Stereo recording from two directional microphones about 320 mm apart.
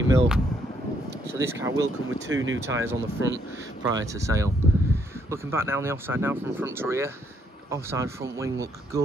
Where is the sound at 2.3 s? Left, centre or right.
Right.